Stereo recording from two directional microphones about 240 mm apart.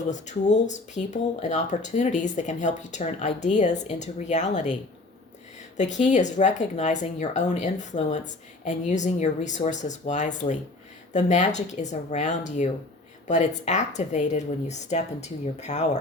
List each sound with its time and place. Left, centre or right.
0.1 s speech: left